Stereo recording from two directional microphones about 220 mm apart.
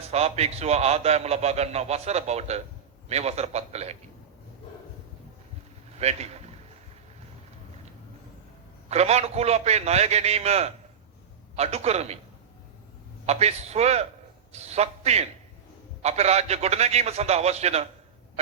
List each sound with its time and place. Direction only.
0.1 s a man's voice: 30° right (ahead or behind)
6.0 s a man's voice: 30° right (ahead or behind)
8.9 s a man's voice: 30° right (ahead or behind)
13.2 s a man's voice: 30° right (ahead or behind)